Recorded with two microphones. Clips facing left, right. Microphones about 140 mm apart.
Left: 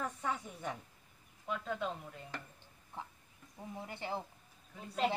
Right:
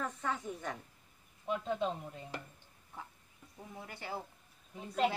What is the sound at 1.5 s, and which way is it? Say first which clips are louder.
Stir: right 4 dB; 20° right (ahead or behind).